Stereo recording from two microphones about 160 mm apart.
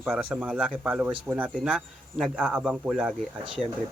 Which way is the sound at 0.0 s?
5° right (ahead or behind).